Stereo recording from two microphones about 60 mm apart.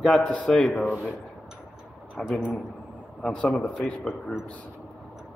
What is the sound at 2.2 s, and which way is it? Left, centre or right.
Speech, centre.